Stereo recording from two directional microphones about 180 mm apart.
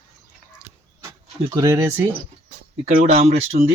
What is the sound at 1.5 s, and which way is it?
Speech, 15° right (ahead or behind).